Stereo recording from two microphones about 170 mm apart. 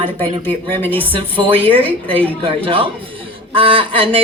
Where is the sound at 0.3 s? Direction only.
30° right (ahead or behind).